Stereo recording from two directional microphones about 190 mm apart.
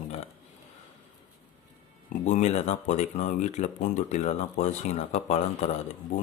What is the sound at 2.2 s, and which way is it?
Speech, 35° left (ahead or behind).